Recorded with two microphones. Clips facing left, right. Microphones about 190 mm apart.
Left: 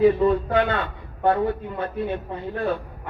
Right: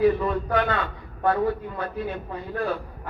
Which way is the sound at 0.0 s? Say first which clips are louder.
Left 4 dB; 25° left (ahead or behind).